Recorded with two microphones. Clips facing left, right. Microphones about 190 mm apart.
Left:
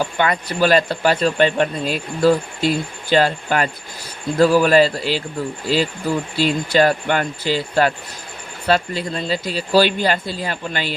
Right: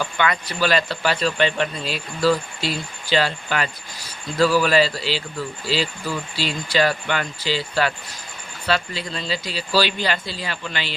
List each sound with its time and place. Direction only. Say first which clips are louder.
0.0 s speech: left 3 dB; 45° left (ahead or behind)